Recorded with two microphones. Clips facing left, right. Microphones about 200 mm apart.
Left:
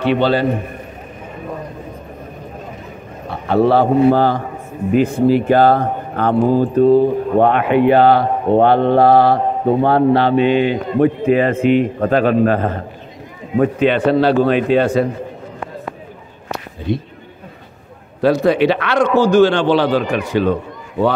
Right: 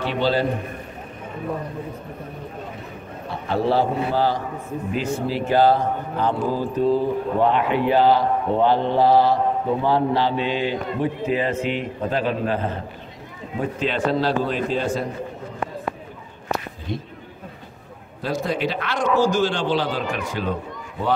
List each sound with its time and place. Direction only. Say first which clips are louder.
0.0 s a man's voice: left 6 dB; 65° left (ahead or behind)
3.4 s a man's voice: left 7 dB; 65° left (ahead or behind)
13.6 s a man's voice: left 9 dB; 65° left (ahead or behind)
16.9 s a man's voice: left 9 dB; 65° left (ahead or behind)
18.2 s a man's voice: left 11 dB; 70° left (ahead or behind)